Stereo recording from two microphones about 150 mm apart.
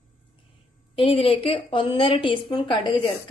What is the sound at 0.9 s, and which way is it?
A woman's voice, 35° left (ahead or behind).